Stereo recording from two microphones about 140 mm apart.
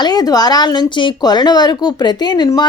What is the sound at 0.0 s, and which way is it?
Speech, 30° left (ahead or behind).